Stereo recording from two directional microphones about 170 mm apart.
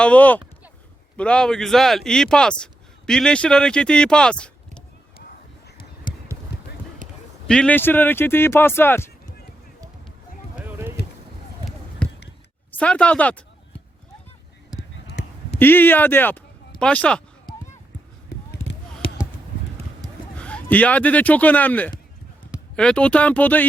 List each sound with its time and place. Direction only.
0.0 s speech: 10° left (ahead or behind)
7.0 s clip-clop: 50° right (ahead or behind)
7.4 s speech: 5° left (ahead or behind)
10.6 s a sound: 10° right (ahead or behind)
12.0 s a sound: 5° left (ahead or behind)
12.8 s speech: 5° left (ahead or behind)
15.5 s speech: 10° left (ahead or behind)
20.4 s speech: 5° left (ahead or behind)